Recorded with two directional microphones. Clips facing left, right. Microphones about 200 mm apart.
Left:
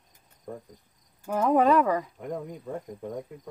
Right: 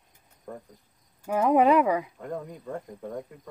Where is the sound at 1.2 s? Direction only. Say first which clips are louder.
Right 1 dB; 10° right (ahead or behind).